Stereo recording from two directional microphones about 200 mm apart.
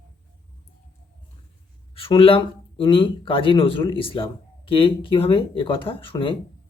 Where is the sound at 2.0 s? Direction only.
25° left (ahead or behind).